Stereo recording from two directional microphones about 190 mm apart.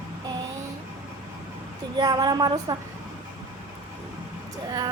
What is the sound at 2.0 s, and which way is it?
Speech, 20° right (ahead or behind).